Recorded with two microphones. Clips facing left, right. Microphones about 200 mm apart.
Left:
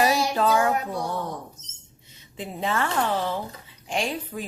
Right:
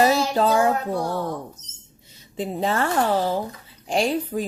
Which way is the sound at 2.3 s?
35° right (ahead or behind).